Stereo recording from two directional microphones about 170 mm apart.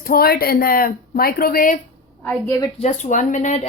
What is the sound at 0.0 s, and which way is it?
A woman's voice, 60° left (ahead or behind).